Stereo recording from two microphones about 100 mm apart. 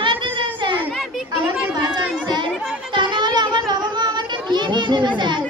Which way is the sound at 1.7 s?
45° right (ahead or behind).